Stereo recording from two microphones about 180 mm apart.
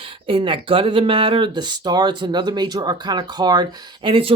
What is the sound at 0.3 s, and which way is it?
Speech, 30° right (ahead or behind).